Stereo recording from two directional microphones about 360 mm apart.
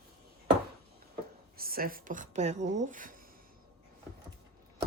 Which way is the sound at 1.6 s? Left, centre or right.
Right.